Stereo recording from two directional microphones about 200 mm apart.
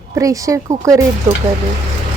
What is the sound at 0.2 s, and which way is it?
Speech, 15° right (ahead or behind).